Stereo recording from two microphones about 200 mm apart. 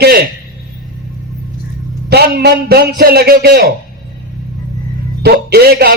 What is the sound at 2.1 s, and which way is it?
A man's voice, 50° right (ahead or behind).